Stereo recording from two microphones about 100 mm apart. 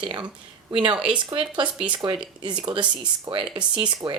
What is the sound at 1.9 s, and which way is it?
Speech, 50° right (ahead or behind).